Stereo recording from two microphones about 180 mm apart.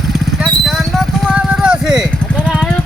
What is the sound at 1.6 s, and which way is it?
Clip-clop, 5° right (ahead or behind).